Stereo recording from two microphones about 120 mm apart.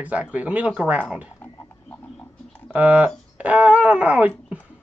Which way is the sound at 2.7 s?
10° right (ahead or behind).